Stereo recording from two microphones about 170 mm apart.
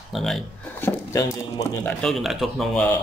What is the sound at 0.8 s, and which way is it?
Speech, 20° left (ahead or behind).